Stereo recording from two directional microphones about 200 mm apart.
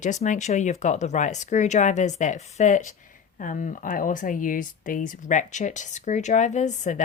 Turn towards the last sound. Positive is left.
turn(degrees=35)  # may be behind; listen again after turning